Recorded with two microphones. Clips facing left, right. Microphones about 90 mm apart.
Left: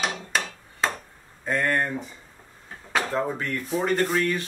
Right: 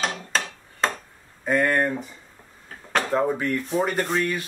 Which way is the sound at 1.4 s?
5° right (ahead or behind).